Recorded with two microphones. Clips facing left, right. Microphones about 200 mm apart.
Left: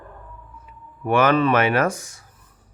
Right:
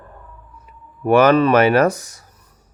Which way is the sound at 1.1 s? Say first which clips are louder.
Right 5 dB; 40° right (ahead or behind).